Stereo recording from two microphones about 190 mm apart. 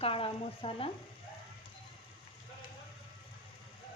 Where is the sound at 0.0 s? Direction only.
30° left (ahead or behind).